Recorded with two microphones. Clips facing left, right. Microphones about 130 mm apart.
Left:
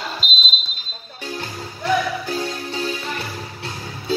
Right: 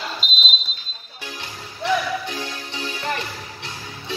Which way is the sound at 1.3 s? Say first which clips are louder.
Left 7 dB; 40° left (ahead or behind).